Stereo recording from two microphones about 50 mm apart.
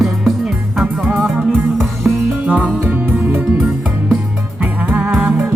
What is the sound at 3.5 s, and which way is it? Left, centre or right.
Music, centre.